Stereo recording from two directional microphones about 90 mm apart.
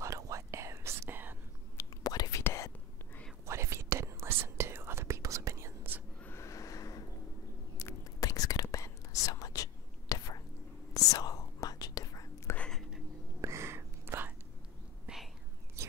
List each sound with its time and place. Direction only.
0.0 s whispering: 35° right (ahead or behind)
1.8 s whispering: 45° left (ahead or behind)
2.4 s whispering: 30° left (ahead or behind)
3.4 s whispering: 30° right (ahead or behind)
6.2 s a sound: 30° left (ahead or behind)
7.7 s whispering: 35° left (ahead or behind)
12.5 s whispering: 10° left (ahead or behind)
13.4 s whispering: 30° right (ahead or behind)
15.1 s whispering: 10° right (ahead or behind)